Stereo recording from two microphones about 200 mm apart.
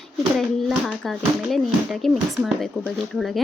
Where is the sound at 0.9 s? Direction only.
Centre (ahead or behind).